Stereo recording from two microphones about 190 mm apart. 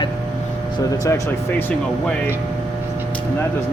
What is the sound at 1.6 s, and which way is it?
Speech, 10° left (ahead or behind).